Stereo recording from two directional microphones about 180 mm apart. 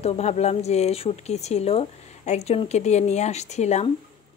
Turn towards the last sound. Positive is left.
turn(degrees=40)  # may be behind; listen again after turning